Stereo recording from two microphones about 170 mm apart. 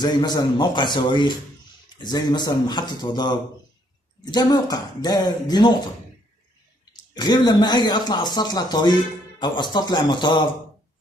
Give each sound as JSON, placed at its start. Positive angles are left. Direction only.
{"t": 0.0, "sound": "speech", "side_deg": 25}
{"t": 6.9, "sound": "speech", "side_deg": 25}